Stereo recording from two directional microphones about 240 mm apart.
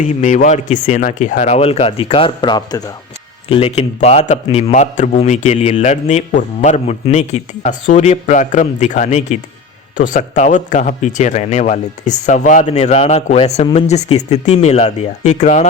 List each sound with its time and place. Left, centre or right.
0.0 s a man's voice: left